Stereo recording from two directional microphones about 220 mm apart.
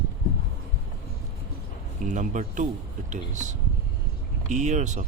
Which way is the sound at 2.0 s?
35° right (ahead or behind).